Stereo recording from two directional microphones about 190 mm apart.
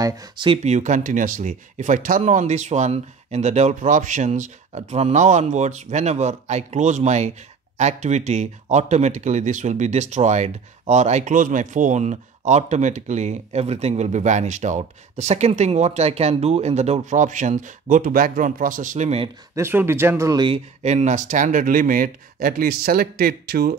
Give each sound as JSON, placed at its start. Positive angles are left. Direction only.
{"t": 0.0, "sound": "speech", "side_deg": -20}
{"t": 0.7, "sound": "speech", "side_deg": -40}
{"t": 19.5, "sound": "speech", "side_deg": -10}